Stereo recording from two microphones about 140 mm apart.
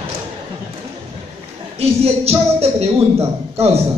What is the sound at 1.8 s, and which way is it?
A man's voice, 45° right (ahead or behind).